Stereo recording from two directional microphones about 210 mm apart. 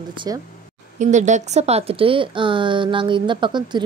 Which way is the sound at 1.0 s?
35° right (ahead or behind).